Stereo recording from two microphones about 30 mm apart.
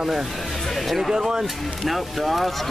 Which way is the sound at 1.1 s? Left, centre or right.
Centre.